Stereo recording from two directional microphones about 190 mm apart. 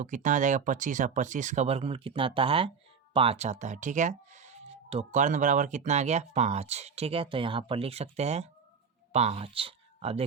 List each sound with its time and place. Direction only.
0.0 s speech: 40° right (ahead or behind)